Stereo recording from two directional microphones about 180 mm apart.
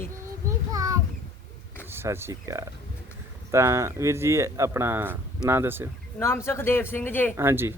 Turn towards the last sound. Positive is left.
turn(degrees=-15)  # may be behind; listen again after turning